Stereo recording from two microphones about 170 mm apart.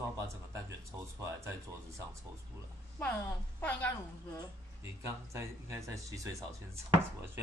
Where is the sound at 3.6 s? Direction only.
10° left (ahead or behind).